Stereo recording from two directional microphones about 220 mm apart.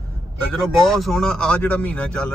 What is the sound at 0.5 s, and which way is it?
A man's voice, centre (ahead or behind).